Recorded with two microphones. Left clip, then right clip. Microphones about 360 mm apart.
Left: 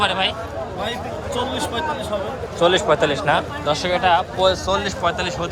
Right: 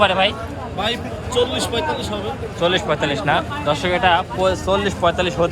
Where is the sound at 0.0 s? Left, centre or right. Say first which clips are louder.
Right 4 dB; centre.